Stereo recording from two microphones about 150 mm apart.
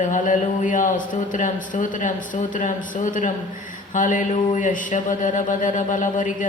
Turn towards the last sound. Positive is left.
turn(degrees=60)  # may be behind; listen again after turning